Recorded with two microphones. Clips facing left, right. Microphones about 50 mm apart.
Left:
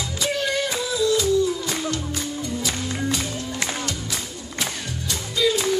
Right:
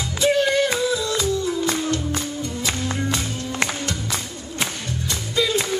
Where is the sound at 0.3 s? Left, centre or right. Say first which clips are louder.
Right 6 dB; right.